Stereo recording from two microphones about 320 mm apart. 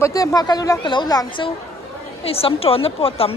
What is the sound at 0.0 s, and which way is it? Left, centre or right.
Speech, centre.